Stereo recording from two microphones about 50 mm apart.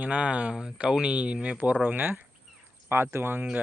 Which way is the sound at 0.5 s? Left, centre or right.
Centre.